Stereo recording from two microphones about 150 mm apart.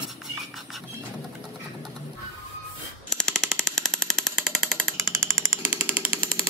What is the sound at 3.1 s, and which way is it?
Jackhammer, centre (ahead or behind).